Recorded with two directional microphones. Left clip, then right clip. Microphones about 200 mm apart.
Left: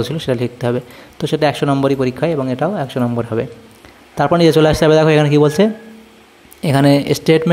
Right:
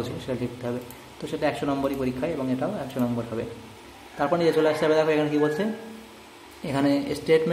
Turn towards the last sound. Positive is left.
turn(degrees=50)  # may be behind; listen again after turning